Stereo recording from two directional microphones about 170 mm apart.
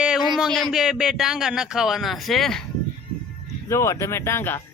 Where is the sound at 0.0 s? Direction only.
5° right (ahead or behind).